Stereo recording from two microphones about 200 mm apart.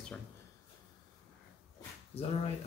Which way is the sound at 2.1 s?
30° left (ahead or behind).